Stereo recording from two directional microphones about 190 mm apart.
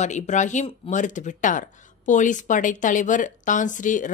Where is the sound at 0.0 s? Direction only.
40° left (ahead or behind).